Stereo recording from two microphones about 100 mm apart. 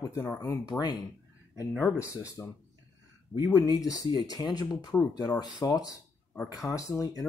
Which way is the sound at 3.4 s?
35° left (ahead or behind).